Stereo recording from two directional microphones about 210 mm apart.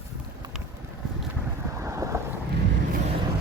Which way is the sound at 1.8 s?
15° right (ahead or behind).